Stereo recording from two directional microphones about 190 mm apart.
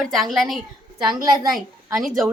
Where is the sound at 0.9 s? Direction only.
25° right (ahead or behind).